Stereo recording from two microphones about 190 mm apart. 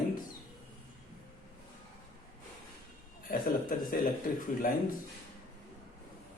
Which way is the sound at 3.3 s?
50° left (ahead or behind).